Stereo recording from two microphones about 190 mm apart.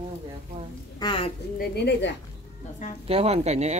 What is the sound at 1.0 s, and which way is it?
Speech, 30° left (ahead or behind).